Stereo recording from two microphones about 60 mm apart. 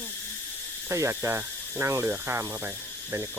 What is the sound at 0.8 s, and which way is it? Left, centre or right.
Speech, right.